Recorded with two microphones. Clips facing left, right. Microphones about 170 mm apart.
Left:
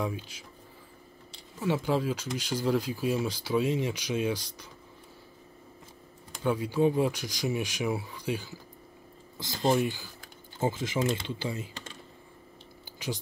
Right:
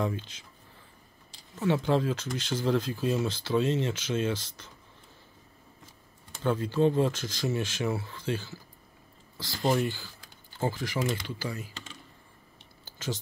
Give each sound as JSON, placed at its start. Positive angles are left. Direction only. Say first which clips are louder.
{"t": 0.0, "sound": "speech", "louder": "right 2 dB", "side_deg": 10}
{"t": 1.6, "sound": "speech", "louder": "right 2 dB", "side_deg": 5}
{"t": 6.4, "sound": "speech", "louder": "even", "side_deg": 10}
{"t": 9.7, "sound": "speech", "louder": "left 1 dB", "side_deg": 15}
{"t": 12.8, "sound": "a sound", "louder": "even", "side_deg": 15}